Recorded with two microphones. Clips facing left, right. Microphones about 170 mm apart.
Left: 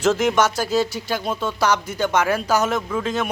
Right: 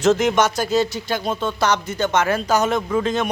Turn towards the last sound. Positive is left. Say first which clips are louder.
# right 3 dB
turn(degrees=5)  # may be behind; listen again after turning